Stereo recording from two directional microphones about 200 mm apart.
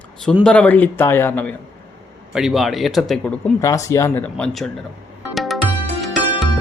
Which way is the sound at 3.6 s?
15° left (ahead or behind).